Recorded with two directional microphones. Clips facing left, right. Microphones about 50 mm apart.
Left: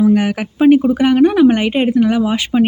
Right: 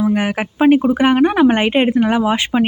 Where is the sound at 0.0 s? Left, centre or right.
Right.